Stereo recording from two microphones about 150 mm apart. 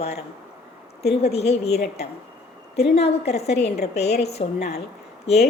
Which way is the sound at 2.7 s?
90° left.